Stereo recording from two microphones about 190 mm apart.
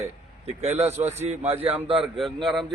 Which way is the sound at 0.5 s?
35° right (ahead or behind).